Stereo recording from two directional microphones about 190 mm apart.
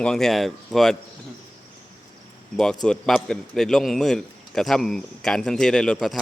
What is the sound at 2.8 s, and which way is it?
A man's voice, 5° left (ahead or behind).